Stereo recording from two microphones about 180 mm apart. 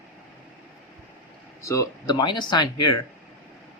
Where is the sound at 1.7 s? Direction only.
20° left (ahead or behind).